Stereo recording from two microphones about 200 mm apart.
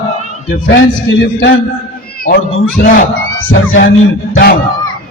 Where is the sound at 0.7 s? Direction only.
55° left (ahead or behind).